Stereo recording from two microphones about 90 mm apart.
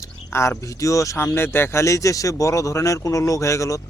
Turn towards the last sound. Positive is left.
turn(degrees=35)  # may be behind; listen again after turning